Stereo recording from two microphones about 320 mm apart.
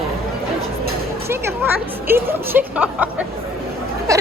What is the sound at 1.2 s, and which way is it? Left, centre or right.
Speech, centre.